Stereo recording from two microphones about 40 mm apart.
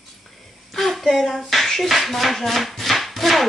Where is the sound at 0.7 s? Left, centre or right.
Centre.